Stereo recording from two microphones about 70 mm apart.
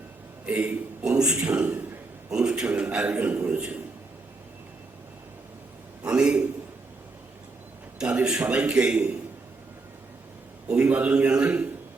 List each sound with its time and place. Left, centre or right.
0.4 s a man's voice: right
6.1 s a sound: centre
8.0 s a man's voice: centre
10.7 s a man's voice: centre